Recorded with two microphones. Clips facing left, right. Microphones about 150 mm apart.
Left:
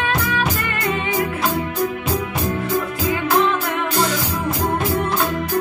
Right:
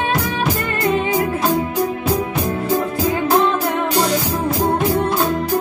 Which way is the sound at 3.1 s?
35° right (ahead or behind).